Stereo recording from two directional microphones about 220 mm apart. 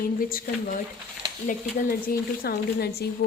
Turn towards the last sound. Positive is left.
turn(degrees=45)  # may be behind; listen again after turning